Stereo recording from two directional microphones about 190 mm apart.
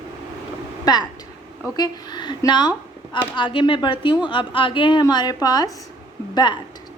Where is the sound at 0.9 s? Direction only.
20° left (ahead or behind).